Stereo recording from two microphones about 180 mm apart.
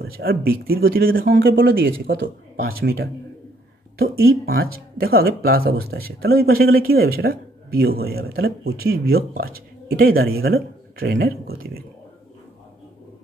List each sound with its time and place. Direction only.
0.0 s speech: 55° right (ahead or behind)